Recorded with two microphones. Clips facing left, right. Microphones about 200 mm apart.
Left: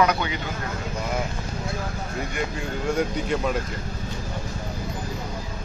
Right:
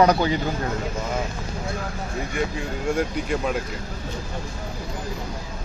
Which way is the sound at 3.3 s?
Centre (ahead or behind).